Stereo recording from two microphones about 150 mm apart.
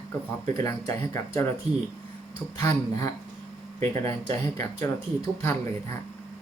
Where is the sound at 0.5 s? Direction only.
25° left (ahead or behind).